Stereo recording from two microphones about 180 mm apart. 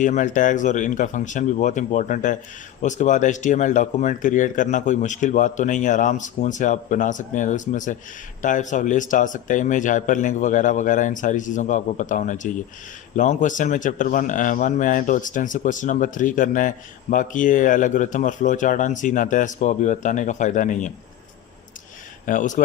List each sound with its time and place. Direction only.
0.0 s a man's voice: 45° left (ahead or behind)
22.3 s a man's voice: 45° left (ahead or behind)